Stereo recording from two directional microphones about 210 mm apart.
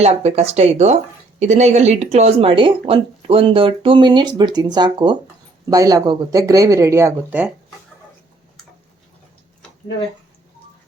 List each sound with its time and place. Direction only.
0.0 s speech: 30° right (ahead or behind); by 7.5 s 5° right (ahead or behind)